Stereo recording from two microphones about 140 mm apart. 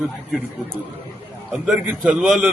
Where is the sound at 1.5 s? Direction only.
Centre (ahead or behind).